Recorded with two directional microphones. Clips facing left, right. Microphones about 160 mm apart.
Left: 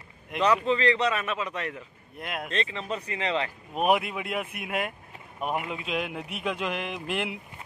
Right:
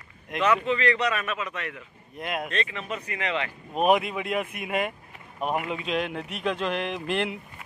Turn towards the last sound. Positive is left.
turn(degrees=5)  # may be behind; listen again after turning